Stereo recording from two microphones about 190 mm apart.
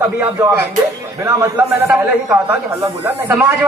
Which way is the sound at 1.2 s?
15° right (ahead or behind).